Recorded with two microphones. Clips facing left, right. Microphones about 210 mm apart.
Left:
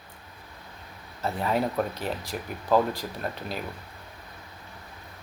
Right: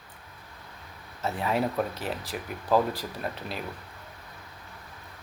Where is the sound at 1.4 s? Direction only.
5° right (ahead or behind).